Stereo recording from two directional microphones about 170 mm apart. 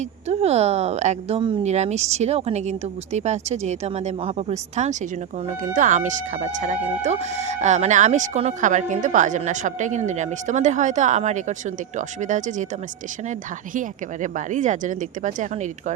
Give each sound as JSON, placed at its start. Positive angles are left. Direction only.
{"t": 0.3, "sound": "a woman's voice", "side_deg": -40}
{"t": 13.7, "sound": "speech", "side_deg": -50}